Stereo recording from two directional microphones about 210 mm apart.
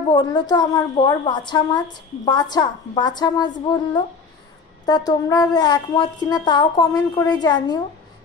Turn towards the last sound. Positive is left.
turn(degrees=20)  # may be behind; listen again after turning